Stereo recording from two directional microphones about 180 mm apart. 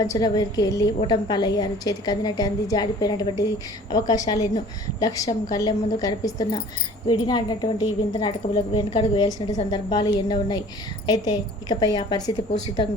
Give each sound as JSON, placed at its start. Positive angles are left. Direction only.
{"t": 0.0, "sound": "a woman's voice", "side_deg": 20}